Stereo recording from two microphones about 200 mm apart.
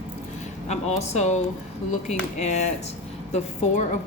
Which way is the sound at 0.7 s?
35° left (ahead or behind).